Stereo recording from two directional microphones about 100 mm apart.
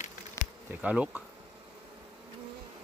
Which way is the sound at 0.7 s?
15° right (ahead or behind).